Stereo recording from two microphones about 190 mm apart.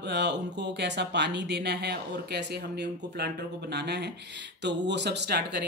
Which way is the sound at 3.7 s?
60° right (ahead or behind).